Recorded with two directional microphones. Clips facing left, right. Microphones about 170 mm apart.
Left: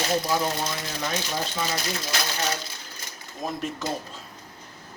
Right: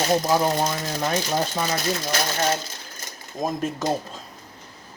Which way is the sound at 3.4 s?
40° right (ahead or behind).